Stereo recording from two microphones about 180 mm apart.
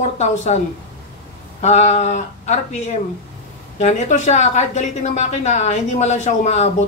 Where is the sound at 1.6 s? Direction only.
40° left (ahead or behind).